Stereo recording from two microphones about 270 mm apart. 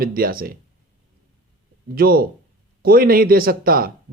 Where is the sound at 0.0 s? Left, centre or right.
Right.